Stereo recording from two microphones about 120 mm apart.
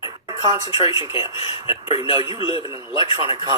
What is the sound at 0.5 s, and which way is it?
Speech, 30° right (ahead or behind).